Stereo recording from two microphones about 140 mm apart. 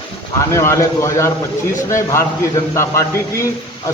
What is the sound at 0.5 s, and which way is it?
A man's voice, 20° left (ahead or behind).